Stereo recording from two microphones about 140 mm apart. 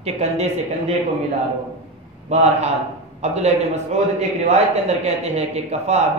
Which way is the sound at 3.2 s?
50° right (ahead or behind).